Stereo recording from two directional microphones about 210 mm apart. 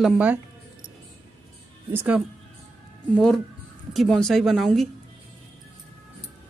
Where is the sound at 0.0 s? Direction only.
5° right (ahead or behind).